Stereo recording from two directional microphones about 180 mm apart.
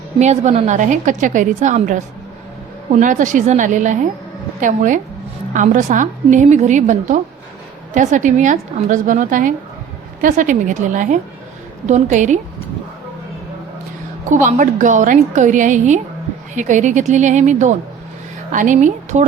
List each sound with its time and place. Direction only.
0.2 s a woman's voice: 40° right (ahead or behind)
14.3 s a woman's voice: 45° right (ahead or behind)